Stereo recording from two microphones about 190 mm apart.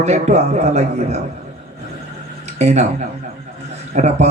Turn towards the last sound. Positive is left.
turn(degrees=-35)  # may be behind; listen again after turning